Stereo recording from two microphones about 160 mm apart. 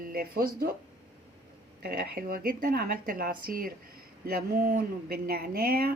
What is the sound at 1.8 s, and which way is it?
Speech, 80° right.